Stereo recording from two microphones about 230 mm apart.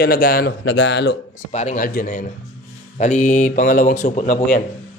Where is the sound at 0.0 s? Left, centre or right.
Left.